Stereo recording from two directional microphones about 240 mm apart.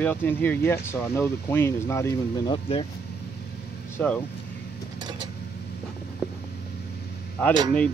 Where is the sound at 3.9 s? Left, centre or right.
Centre.